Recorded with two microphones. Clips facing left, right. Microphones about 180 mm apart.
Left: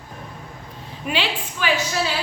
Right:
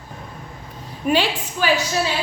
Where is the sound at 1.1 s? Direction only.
45° right (ahead or behind).